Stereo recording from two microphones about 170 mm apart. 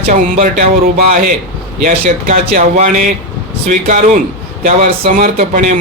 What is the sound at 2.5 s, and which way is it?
Speech, 55° right (ahead or behind).